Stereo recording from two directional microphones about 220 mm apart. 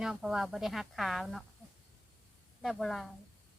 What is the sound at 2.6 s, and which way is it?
Speech, centre (ahead or behind).